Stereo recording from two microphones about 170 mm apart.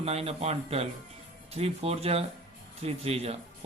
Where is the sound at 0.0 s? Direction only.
35° right (ahead or behind).